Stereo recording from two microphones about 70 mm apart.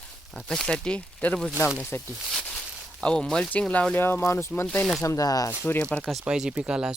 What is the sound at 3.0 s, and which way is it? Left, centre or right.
Speech, centre.